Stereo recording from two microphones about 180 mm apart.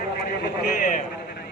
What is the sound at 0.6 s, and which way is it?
Speech, 55° left (ahead or behind).